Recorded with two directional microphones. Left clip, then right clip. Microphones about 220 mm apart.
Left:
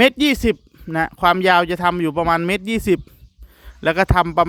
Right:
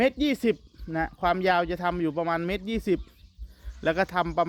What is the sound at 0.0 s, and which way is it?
Speech, 40° left (ahead or behind).